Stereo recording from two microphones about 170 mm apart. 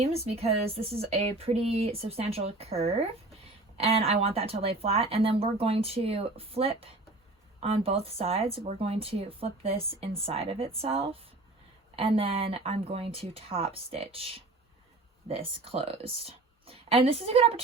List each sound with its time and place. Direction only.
0.0 s speech: 35° right (ahead or behind)